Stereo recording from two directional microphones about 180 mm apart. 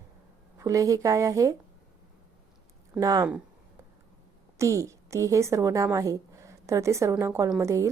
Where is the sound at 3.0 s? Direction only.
20° right (ahead or behind).